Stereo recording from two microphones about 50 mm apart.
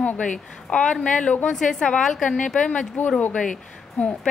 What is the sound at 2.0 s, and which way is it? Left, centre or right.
Speech, centre.